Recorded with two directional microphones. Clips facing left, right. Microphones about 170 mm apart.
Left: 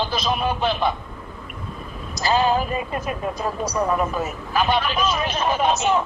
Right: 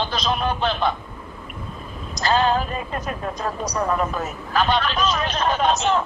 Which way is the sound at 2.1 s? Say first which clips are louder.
Even; 5° left (ahead or behind).